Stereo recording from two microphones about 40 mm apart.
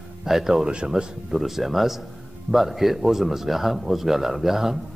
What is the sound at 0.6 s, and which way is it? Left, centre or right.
Speech, right.